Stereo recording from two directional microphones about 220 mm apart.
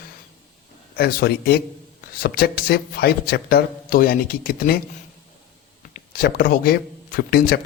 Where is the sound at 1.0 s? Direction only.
45° left (ahead or behind).